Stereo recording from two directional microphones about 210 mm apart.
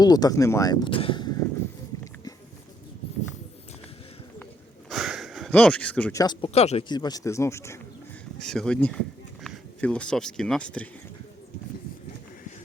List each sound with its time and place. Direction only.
0.0 s speech: 20° left (ahead or behind)
4.9 s speech: centre (ahead or behind)